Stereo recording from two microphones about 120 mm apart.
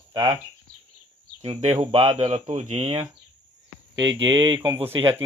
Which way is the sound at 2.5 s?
85° right.